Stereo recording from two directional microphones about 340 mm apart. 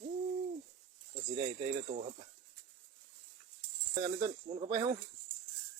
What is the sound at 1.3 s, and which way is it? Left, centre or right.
Speech, centre.